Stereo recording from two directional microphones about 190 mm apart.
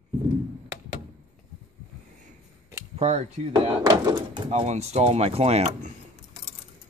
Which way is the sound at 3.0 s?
35° right (ahead or behind).